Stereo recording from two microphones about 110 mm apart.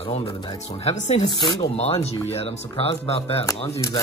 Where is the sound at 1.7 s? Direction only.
70° left (ahead or behind).